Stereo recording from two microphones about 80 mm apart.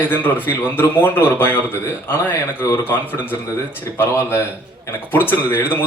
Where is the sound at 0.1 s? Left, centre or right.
Left.